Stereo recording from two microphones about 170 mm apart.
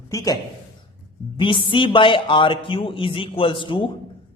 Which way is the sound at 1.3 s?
30° left (ahead or behind).